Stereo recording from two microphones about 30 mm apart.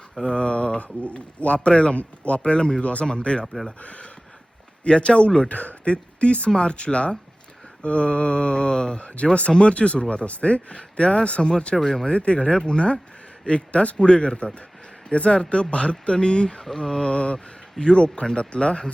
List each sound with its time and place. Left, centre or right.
0.2 s a man's voice: left
2.8 s a man's voice: left
3.1 s speech: left
3.4 s speech: centre
3.8 s a man's voice: left
4.9 s speech: left
5.5 s a man's voice: left
5.9 s speech: left
9.0 s a man's voice: left
11.8 s mantra: centre
12.0 s speech: left
16.6 s mantra: centre
17.0 s speech: left